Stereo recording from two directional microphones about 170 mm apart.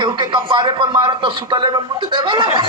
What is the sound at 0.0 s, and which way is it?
Speech, 25° right (ahead or behind).